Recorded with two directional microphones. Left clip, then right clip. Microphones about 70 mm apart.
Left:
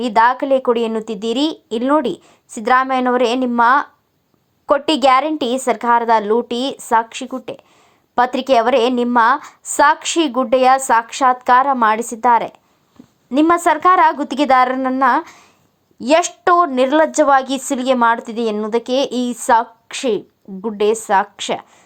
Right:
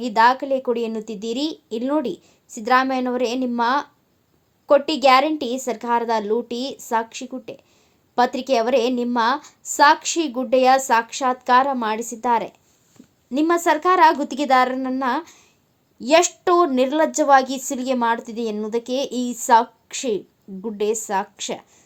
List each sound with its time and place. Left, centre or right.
0.0 s a woman's voice: left
16.0 s a woman's voice: left